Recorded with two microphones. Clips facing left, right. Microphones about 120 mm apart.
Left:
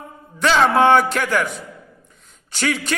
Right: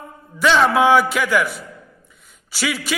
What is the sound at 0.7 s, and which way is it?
Speech, 5° right (ahead or behind).